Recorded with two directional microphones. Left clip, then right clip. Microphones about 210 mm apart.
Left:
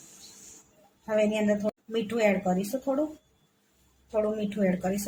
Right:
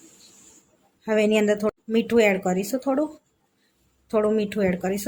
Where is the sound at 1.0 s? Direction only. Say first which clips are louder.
Right 5 dB; 40° right (ahead or behind).